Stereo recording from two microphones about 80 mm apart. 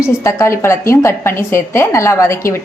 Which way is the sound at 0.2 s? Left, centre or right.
Left.